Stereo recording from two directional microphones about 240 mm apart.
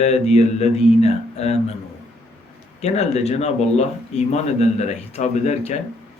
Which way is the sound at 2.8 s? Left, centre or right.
Left.